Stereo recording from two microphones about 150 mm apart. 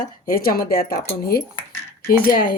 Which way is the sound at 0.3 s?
80° left.